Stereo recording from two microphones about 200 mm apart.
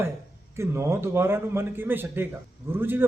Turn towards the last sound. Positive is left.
turn(degrees=-10)  # may be behind; listen again after turning